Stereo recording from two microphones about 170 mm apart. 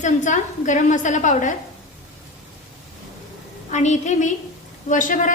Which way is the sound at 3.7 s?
45° left (ahead or behind).